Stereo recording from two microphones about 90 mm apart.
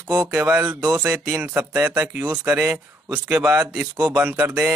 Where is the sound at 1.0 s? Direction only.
25° right (ahead or behind).